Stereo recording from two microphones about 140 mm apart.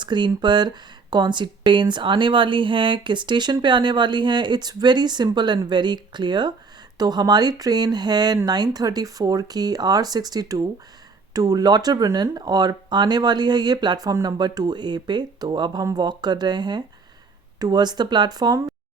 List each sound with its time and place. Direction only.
0.0 s speech: 35° right (ahead or behind)